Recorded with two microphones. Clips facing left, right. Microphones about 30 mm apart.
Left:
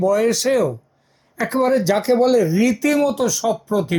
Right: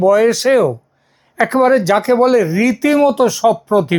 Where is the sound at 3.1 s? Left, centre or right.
Right.